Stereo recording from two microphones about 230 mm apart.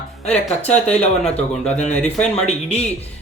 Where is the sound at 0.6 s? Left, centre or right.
Left.